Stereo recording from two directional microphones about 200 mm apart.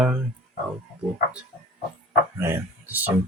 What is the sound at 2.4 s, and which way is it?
Speech, 10° right (ahead or behind).